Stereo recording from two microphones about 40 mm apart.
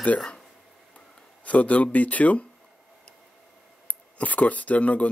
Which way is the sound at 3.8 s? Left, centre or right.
Left.